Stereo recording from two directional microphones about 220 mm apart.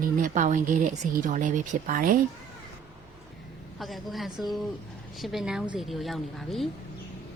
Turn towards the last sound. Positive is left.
turn(degrees=0)  # may be behind; listen again after turning